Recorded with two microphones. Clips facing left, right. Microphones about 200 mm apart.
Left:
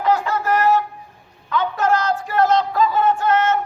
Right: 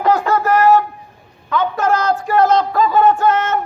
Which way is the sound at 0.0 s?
45° right (ahead or behind).